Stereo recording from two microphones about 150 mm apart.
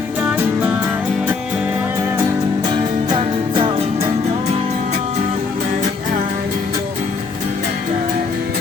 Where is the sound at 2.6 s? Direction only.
30° right (ahead or behind).